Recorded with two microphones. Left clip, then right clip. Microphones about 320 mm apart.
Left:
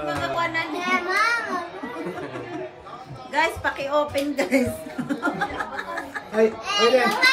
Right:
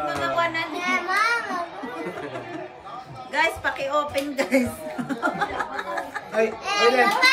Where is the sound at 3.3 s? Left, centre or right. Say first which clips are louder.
Even; centre.